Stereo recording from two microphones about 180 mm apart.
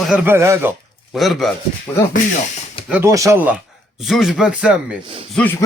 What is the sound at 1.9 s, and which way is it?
Speech, 10° left (ahead or behind).